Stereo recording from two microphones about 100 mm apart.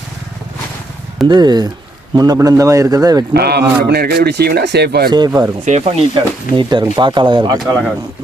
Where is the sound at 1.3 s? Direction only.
45° right (ahead or behind).